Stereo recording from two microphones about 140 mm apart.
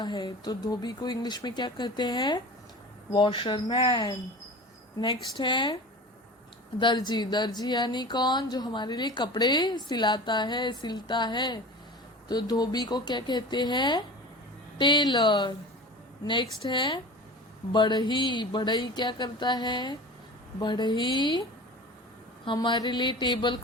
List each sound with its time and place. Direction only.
0.0 s speech: 30° left (ahead or behind)
22.4 s speech: 35° left (ahead or behind)